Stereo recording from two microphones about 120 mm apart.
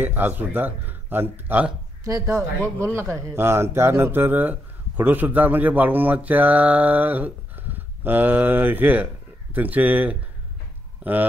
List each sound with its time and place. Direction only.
0.0 s speech: 15° right (ahead or behind)
2.0 s speech: 25° right (ahead or behind)